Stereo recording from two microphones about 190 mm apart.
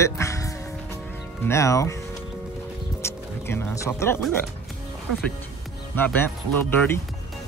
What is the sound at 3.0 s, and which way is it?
Speech, 15° left (ahead or behind).